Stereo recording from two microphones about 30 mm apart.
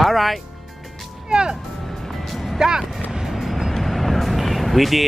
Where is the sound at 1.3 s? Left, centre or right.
Right.